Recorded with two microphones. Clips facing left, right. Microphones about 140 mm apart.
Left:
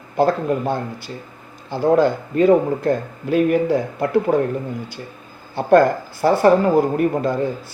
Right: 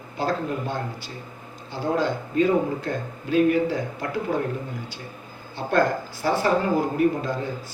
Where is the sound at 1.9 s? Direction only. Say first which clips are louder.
Left 5 dB; 55° left (ahead or behind).